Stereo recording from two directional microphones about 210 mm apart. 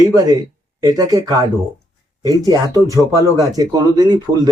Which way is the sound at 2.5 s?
15° right (ahead or behind).